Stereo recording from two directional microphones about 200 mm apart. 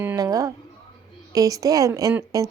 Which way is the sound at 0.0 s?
15° right (ahead or behind).